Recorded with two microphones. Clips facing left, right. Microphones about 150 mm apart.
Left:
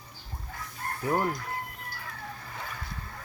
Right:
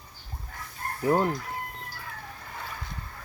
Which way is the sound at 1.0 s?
20° right (ahead or behind).